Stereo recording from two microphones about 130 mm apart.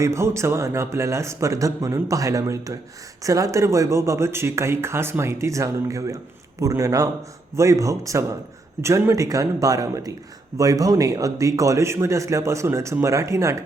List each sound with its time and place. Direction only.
0.0 s speech: 20° right (ahead or behind)